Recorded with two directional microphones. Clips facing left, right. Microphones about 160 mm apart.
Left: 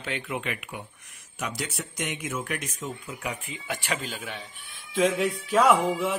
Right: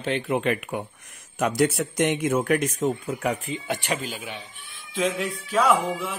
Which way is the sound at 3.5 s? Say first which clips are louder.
Right 4 dB; 25° right (ahead or behind).